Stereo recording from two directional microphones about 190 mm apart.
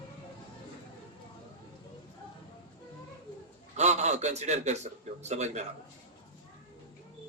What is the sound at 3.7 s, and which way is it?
A man's voice, 35° right (ahead or behind).